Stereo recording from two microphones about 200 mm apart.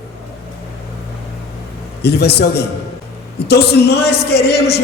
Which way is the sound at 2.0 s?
55° left (ahead or behind).